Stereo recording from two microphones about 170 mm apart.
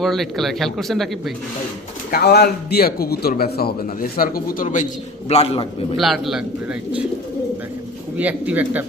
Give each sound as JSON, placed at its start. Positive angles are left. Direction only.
{"t": 0.0, "sound": "speech", "side_deg": 0}
{"t": 2.0, "sound": "a man's voice", "side_deg": 65}
{"t": 5.3, "sound": "a man's voice", "side_deg": 35}
{"t": 6.0, "sound": "speech", "side_deg": 0}
{"t": 8.2, "sound": "speech", "side_deg": -10}